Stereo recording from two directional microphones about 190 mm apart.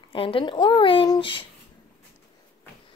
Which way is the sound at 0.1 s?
30° left (ahead or behind).